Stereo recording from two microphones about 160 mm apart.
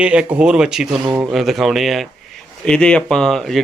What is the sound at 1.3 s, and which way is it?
Speech, centre (ahead or behind).